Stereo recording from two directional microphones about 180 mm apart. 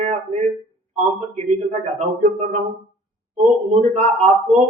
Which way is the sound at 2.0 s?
40° right (ahead or behind).